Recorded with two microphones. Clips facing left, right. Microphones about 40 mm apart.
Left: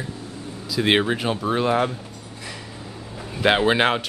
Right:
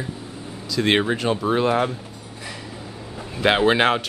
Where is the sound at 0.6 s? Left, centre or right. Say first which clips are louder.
Even; centre.